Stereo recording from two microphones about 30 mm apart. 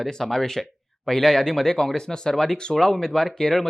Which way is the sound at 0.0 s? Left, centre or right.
Centre.